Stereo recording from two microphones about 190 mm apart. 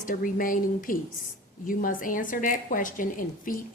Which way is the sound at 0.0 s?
45° left (ahead or behind).